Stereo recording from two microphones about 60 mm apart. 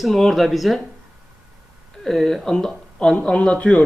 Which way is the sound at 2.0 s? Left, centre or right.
Centre.